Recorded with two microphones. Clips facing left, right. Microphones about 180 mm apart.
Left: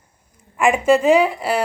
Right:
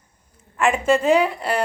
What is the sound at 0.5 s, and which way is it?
A woman's voice, 10° left (ahead or behind).